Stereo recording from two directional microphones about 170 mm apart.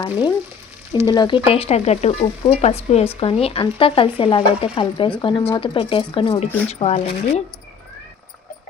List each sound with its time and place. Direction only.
0.0 s speech: 25° left (ahead or behind)
1.0 s stir: 25° left (ahead or behind)
4.2 s speech: 35° left (ahead or behind)
5.5 s stir: 30° left (ahead or behind)